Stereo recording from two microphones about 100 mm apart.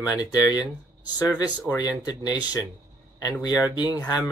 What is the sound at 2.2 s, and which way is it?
Speech, 45° left (ahead or behind).